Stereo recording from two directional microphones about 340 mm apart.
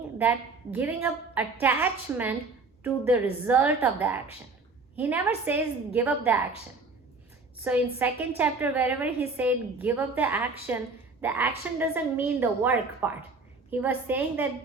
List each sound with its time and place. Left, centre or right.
0.2 s a woman's voice: centre
3.4 s a woman's voice: centre
7.6 s a woman's voice: centre